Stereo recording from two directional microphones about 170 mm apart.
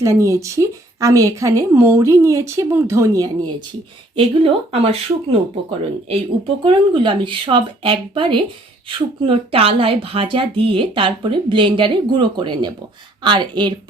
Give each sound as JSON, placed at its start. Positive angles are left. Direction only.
{"t": 0.0, "sound": "a woman's voice", "side_deg": -15}
{"t": 4.1, "sound": "speech", "side_deg": -30}
{"t": 6.6, "sound": "speech", "side_deg": -30}